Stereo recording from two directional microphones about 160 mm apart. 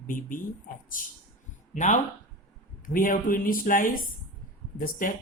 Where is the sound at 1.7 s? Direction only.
50° left (ahead or behind).